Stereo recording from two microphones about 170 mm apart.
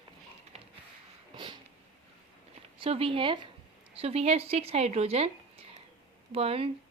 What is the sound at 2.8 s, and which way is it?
Speech, 35° right (ahead or behind).